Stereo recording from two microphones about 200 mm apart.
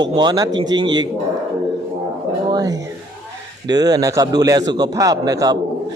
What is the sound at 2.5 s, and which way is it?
A man's voice, 20° right (ahead or behind).